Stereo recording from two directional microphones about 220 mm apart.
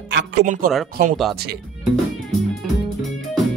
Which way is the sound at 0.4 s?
35° right (ahead or behind).